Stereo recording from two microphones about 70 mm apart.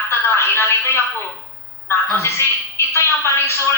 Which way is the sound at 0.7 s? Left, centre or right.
Left.